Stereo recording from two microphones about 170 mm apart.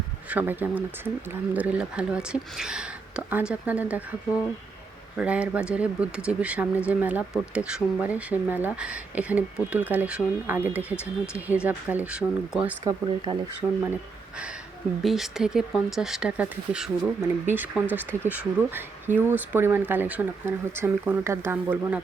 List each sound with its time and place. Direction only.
0.3 s speech: 10° right (ahead or behind)
5.1 s speech: 5° right (ahead or behind)
10.9 s speech: 15° left (ahead or behind)
11.6 s speech: 10° right (ahead or behind)
12.8 s speech: 20° right (ahead or behind)
15.0 s speech: centre (ahead or behind)